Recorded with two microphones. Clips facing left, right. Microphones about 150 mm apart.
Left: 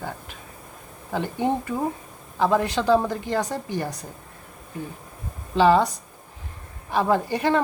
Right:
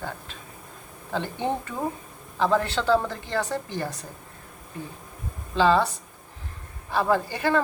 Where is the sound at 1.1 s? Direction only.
10° left (ahead or behind).